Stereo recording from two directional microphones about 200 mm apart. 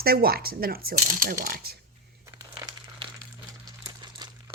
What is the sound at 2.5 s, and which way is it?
Crumpling, 20° right (ahead or behind).